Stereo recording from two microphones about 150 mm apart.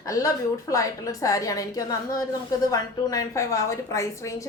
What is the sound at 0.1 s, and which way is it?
A woman's voice, 20° left (ahead or behind).